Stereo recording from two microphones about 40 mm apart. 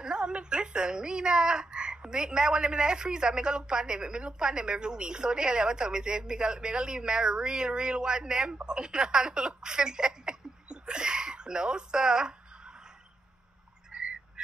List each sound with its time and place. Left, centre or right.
0.0 s a woman's voice: right
13.9 s frog: right